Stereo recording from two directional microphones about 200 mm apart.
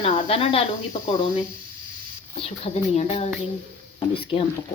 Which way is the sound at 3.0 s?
30° left (ahead or behind).